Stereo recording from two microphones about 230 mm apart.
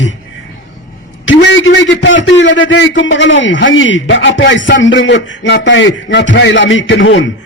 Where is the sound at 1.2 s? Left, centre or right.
Left.